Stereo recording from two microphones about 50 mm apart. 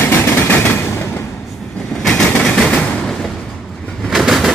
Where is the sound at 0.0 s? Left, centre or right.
Left.